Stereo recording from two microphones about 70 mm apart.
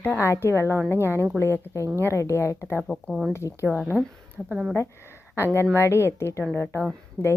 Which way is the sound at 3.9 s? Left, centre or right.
Centre.